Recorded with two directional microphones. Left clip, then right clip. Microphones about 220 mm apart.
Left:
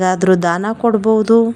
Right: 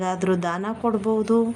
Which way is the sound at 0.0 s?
30° left (ahead or behind).